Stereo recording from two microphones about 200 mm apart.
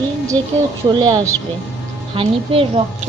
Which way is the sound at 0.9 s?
20° right (ahead or behind).